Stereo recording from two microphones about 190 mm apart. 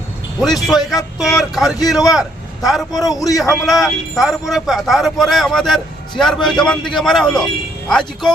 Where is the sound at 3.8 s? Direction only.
Centre (ahead or behind).